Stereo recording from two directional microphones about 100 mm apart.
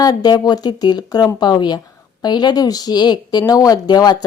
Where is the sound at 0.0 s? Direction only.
40° left (ahead or behind).